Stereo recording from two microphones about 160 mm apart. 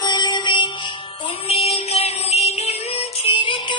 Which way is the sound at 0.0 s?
25° left (ahead or behind).